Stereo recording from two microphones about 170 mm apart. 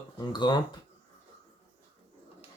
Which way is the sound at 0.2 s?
25° left (ahead or behind).